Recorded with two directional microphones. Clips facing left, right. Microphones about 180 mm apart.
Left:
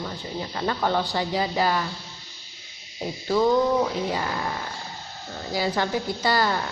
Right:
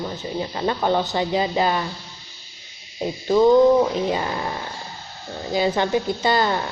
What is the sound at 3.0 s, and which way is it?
A woman's voice, 20° right (ahead or behind).